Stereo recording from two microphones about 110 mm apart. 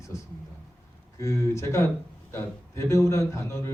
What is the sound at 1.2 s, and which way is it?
A man's voice, 25° left (ahead or behind).